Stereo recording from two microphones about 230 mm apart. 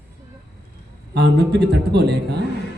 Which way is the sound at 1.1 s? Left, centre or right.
Right.